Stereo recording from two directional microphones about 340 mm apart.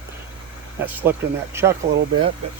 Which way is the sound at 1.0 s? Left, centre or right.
Centre.